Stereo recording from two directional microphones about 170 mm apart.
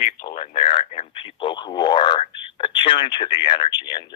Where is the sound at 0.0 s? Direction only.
55° left (ahead or behind).